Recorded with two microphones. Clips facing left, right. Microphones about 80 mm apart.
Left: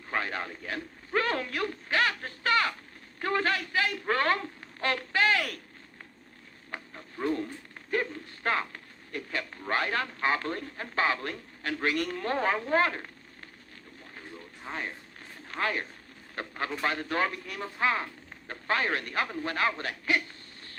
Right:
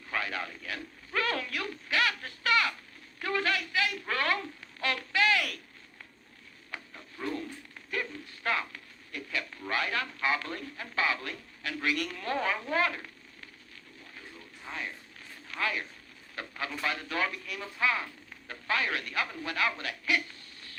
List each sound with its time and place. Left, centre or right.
0.1 s a man's voice: left
6.7 s a sound: left
7.9 s speech: left
14.7 s speech: left